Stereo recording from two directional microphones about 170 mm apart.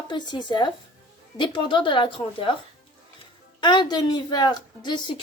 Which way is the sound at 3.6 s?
25° left (ahead or behind).